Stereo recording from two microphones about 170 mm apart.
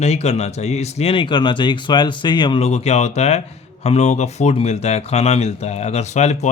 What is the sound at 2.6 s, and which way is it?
Speech, 40° left (ahead or behind).